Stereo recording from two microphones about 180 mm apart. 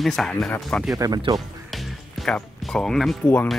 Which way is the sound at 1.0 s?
20° right (ahead or behind).